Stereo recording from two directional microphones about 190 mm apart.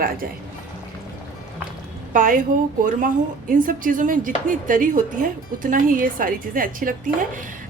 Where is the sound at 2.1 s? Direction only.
45° right (ahead or behind).